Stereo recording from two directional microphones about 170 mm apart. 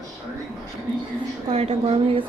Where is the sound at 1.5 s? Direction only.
35° right (ahead or behind).